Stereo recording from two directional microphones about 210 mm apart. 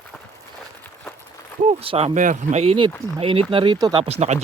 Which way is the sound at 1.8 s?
25° right (ahead or behind).